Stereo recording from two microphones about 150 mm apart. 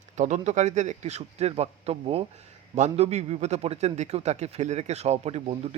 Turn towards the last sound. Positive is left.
turn(degrees=-45)  # may be behind; listen again after turning